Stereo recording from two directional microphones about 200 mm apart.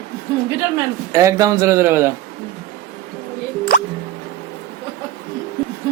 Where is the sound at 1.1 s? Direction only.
15° right (ahead or behind).